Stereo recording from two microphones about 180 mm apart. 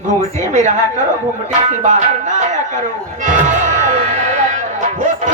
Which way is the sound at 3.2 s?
45° right (ahead or behind).